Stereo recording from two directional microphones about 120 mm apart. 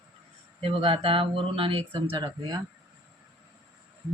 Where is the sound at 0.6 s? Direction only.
50° right (ahead or behind); by 2.6 s 35° right (ahead or behind).